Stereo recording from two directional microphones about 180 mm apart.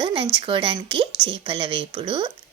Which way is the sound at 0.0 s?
30° right (ahead or behind).